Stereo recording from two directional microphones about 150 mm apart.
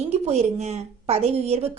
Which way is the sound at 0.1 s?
45° right (ahead or behind).